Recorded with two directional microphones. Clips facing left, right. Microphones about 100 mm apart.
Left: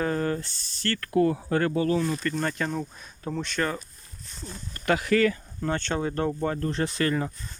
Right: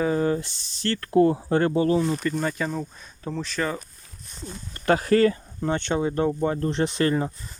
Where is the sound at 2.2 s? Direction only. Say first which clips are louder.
Right 2 dB; 10° right (ahead or behind).